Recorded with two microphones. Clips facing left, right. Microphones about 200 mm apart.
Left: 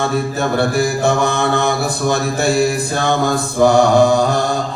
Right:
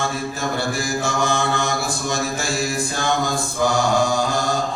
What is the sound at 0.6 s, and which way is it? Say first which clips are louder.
Mantra: left 10 dB; 60° left (ahead or behind).